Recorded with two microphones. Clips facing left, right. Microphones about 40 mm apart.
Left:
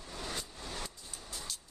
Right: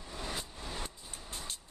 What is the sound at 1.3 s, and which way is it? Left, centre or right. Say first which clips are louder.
Vehicle: right 1 dB; right.